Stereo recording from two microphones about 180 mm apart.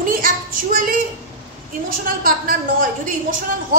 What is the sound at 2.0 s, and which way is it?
A woman's voice, 50° right (ahead or behind).